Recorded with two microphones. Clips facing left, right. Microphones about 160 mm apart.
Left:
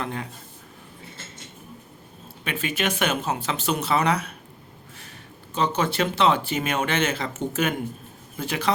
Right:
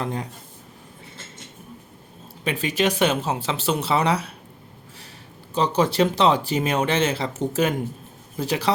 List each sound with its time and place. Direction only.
0.0 s speech: 35° right (ahead or behind)
2.4 s speech: 35° right (ahead or behind)
5.5 s speech: 35° right (ahead or behind)